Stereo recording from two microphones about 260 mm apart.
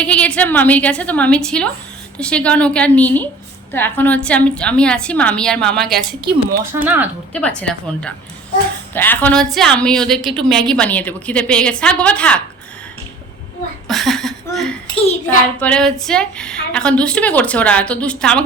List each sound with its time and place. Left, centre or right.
0.0 s a woman's voice: centre
6.2 s speech: right
6.8 s speech: centre
7.3 s a woman's voice: centre
13.8 s a sound: centre
14.8 s a child's voice: left
15.6 s a woman's voice: centre